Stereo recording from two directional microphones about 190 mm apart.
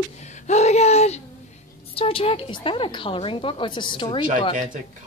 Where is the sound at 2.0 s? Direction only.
30° left (ahead or behind).